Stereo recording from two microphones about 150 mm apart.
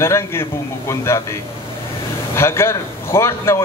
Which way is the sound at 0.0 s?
15° left (ahead or behind).